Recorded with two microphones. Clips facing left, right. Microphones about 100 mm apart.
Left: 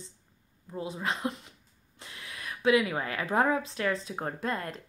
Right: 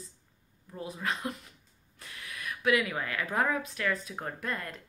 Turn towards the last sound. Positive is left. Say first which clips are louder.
# left 3 dB
turn(degrees=30)  # may be behind; listen again after turning